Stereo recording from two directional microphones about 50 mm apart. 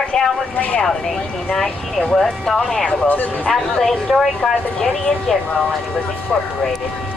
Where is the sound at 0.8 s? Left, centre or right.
Centre.